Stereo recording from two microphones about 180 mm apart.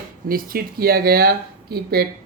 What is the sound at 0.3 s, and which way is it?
Speech, 55° right (ahead or behind).